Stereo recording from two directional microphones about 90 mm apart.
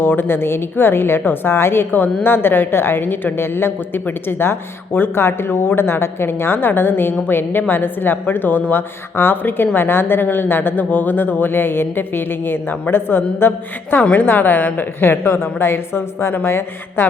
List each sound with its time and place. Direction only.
0.0 s a woman's voice: 25° left (ahead or behind)